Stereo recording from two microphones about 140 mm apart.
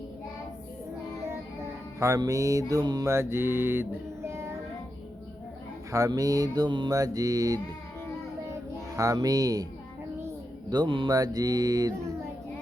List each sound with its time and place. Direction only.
2.0 s mantra: 25° right (ahead or behind)
5.9 s mantra: 25° right (ahead or behind)
9.0 s mantra: 25° right (ahead or behind)
10.7 s mantra: 35° right (ahead or behind)